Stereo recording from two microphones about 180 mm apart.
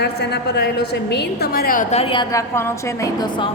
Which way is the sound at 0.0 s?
65° left (ahead or behind).